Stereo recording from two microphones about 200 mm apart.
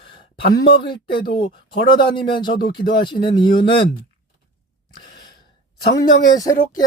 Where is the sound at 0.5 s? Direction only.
25° left (ahead or behind).